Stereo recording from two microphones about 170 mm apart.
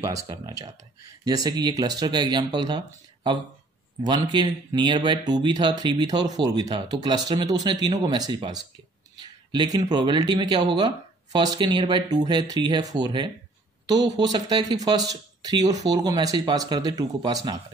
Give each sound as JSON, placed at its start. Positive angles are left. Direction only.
{"t": 0.0, "sound": "speech", "side_deg": -20}
{"t": 4.0, "sound": "speech", "side_deg": -25}